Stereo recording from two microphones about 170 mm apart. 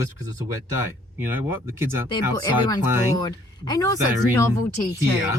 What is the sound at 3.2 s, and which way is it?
Speech, 25° left (ahead or behind).